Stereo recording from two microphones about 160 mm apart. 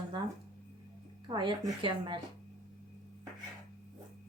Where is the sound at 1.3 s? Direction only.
30° right (ahead or behind).